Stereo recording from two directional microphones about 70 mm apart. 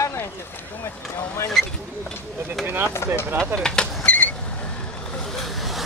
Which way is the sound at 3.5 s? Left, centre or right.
Centre.